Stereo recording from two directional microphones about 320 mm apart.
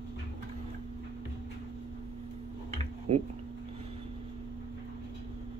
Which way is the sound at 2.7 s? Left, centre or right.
Centre.